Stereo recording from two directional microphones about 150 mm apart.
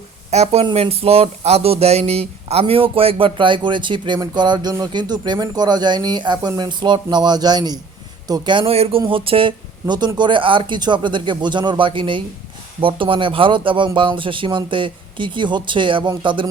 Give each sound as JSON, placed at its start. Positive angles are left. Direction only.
{"t": 0.3, "sound": "speech", "side_deg": -45}